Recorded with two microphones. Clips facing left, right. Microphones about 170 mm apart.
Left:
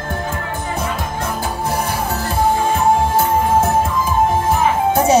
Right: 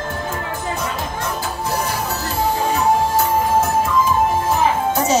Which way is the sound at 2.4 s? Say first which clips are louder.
Left 3 dB; 55° left (ahead or behind).